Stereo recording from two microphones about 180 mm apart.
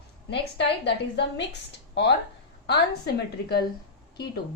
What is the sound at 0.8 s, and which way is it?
Speech, 70° left (ahead or behind).